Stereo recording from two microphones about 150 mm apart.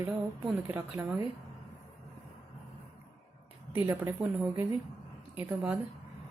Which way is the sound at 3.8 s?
15° right (ahead or behind).